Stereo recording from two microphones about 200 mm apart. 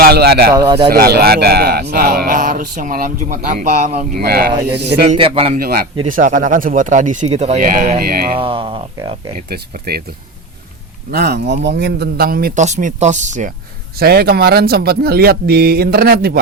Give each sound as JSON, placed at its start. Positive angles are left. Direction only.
{"t": 0.0, "sound": "speech", "side_deg": -50}
{"t": 0.5, "sound": "speech", "side_deg": -20}
{"t": 0.9, "sound": "speech", "side_deg": -50}
{"t": 4.2, "sound": "a man's voice", "side_deg": -50}
{"t": 5.0, "sound": "speech", "side_deg": -25}
{"t": 5.5, "sound": "speech", "side_deg": -50}
{"t": 8.3, "sound": "speech", "side_deg": -25}
{"t": 9.5, "sound": "speech", "side_deg": -50}
{"t": 11.1, "sound": "speech", "side_deg": -55}
{"t": 14.0, "sound": "speech", "side_deg": -50}